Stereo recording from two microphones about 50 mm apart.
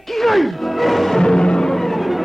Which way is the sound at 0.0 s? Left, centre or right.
Centre.